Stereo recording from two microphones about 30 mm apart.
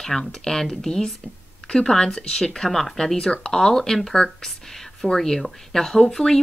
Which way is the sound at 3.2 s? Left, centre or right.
Left.